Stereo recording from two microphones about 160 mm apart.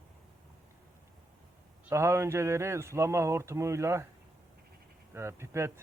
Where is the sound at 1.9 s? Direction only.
15° right (ahead or behind).